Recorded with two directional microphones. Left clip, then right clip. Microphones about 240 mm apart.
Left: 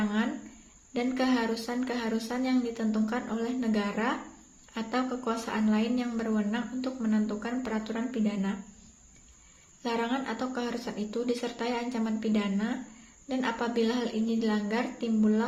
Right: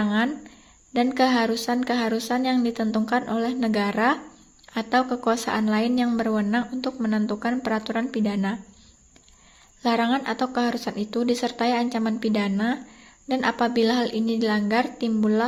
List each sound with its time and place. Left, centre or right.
0.9 s a woman's voice: right
9.8 s a woman's voice: right